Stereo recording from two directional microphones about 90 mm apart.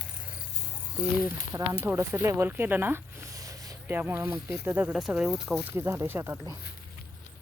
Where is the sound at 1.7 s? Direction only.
25° right (ahead or behind).